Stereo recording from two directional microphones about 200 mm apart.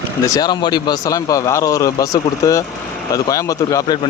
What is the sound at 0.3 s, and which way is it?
A man's voice, 20° left (ahead or behind).